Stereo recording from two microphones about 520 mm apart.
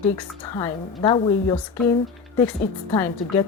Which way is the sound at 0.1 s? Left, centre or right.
Centre.